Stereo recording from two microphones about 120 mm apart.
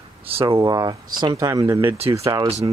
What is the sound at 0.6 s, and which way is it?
Speech, 35° right (ahead or behind).